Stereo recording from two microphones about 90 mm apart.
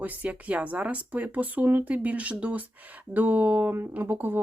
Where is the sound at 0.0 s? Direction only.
20° right (ahead or behind).